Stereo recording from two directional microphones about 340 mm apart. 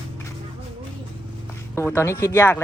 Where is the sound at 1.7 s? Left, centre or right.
Centre.